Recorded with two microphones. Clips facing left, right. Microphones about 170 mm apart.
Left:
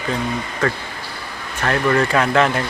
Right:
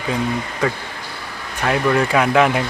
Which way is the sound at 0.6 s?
10° right (ahead or behind).